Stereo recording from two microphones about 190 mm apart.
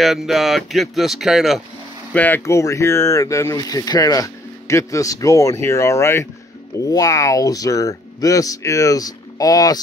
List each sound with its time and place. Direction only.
0.0 s speech: centre (ahead or behind)
2.1 s speech: 10° left (ahead or behind)